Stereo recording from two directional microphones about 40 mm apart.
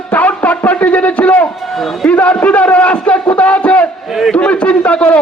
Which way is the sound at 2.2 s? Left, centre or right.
Left.